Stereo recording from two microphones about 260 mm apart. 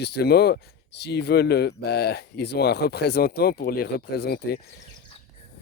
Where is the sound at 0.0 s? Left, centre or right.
Left.